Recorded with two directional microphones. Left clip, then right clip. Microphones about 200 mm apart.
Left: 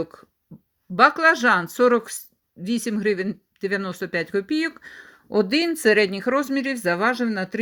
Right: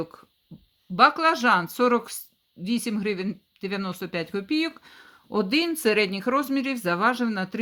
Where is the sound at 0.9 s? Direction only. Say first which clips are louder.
Left 3 dB; 10° left (ahead or behind).